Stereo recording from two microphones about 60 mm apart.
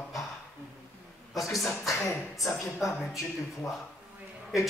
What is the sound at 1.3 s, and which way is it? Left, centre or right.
Speech, centre.